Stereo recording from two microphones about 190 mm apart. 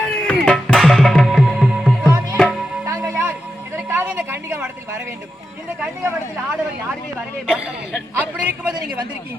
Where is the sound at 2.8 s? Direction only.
15° right (ahead or behind).